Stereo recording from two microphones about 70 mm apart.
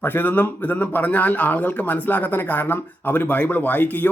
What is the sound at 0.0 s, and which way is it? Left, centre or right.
Speech, left.